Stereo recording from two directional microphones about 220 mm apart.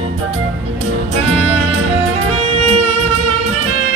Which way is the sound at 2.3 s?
30° right (ahead or behind).